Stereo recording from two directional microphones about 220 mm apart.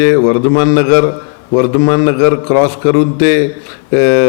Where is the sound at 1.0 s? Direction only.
20° left (ahead or behind).